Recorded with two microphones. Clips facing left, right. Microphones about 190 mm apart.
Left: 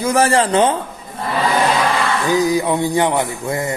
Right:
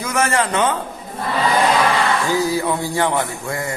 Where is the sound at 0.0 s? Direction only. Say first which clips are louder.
Left 5 dB; 30° left (ahead or behind).